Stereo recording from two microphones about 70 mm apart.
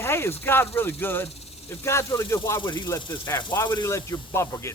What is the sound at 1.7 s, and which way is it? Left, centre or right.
Speech, left.